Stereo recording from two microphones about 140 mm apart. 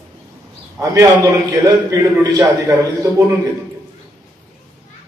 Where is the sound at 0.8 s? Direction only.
25° right (ahead or behind).